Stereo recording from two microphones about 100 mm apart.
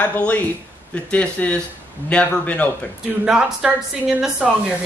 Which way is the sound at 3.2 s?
10° right (ahead or behind).